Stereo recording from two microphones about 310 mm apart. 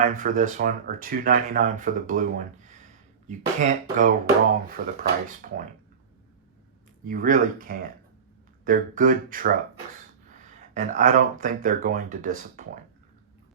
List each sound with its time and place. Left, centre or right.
0.0 s speech: right
7.0 s speech: right